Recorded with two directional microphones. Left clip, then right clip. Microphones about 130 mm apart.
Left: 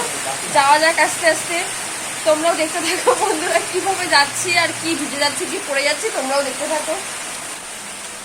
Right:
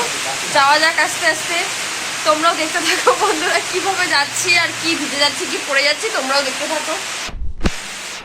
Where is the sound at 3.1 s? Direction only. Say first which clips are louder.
Even; 10° left (ahead or behind).